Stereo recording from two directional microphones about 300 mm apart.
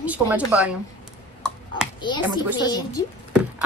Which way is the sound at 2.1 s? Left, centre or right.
Centre.